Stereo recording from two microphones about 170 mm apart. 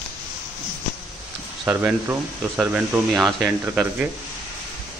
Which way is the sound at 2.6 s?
5° right (ahead or behind).